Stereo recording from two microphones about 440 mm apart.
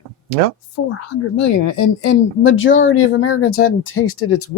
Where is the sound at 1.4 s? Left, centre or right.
Left.